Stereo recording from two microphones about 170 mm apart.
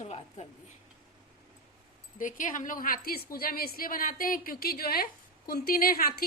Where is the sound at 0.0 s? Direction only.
40° left (ahead or behind).